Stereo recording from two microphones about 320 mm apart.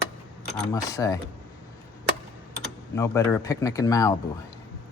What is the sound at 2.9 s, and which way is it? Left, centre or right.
Speech, centre.